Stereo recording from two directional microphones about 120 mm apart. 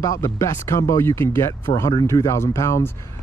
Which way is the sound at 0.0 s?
25° left (ahead or behind).